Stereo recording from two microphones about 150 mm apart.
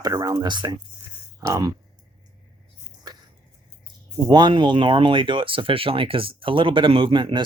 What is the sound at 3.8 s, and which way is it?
Speech, 30° right (ahead or behind).